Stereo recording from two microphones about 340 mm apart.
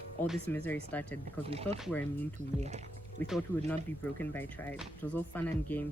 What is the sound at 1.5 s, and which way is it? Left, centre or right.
Speech, centre.